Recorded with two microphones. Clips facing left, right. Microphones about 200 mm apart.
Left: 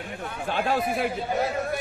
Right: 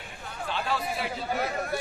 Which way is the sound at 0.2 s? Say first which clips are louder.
Left 5 dB; 55° left (ahead or behind).